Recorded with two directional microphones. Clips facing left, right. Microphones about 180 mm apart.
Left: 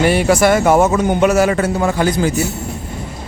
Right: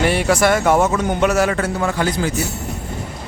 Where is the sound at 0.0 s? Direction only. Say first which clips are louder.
Left 3 dB; 5° left (ahead or behind).